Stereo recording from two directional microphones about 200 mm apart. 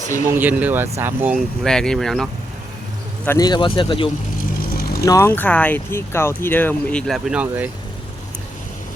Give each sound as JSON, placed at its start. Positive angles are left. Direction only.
{"t": 0.3, "sound": "speech", "side_deg": -10}
{"t": 3.2, "sound": "speech", "side_deg": 20}
{"t": 5.0, "sound": "speech", "side_deg": 15}